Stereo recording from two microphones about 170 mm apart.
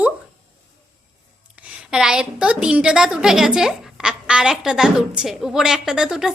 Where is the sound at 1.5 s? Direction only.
5° right (ahead or behind).